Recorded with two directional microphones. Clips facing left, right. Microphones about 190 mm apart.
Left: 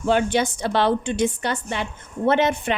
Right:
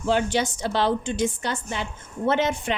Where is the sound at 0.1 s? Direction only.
60° left (ahead or behind).